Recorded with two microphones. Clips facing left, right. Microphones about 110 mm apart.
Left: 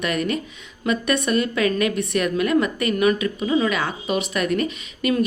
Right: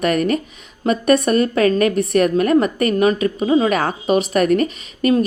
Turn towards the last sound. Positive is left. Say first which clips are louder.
# right 5 dB
turn(degrees=-40)  # may be behind; listen again after turning